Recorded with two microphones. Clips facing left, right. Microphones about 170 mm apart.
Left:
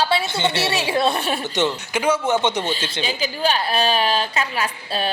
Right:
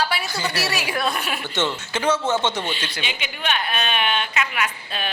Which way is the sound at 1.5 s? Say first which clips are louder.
Left 3 dB; 15° left (ahead or behind).